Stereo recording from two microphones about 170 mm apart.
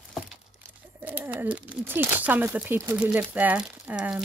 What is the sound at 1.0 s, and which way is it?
Speech, 10° right (ahead or behind).